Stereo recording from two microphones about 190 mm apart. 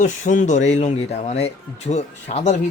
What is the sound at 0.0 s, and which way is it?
Speech, 40° left (ahead or behind).